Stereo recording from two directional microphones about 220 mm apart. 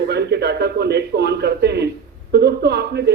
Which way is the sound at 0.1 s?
50° right (ahead or behind).